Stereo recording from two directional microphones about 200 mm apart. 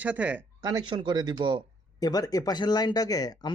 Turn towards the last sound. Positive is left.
turn(degrees=20)  # may be behind; listen again after turning